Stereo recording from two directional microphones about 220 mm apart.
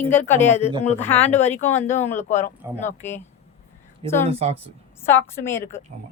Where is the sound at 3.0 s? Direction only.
10° left (ahead or behind).